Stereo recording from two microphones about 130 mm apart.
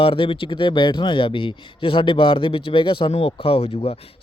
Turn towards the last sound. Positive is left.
turn(degrees=50)  # may be behind; listen again after turning